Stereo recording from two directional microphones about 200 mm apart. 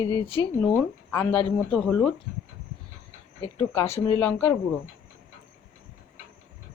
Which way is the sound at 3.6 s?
10° left (ahead or behind).